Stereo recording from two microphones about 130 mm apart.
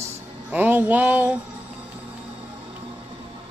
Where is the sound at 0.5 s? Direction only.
15° right (ahead or behind).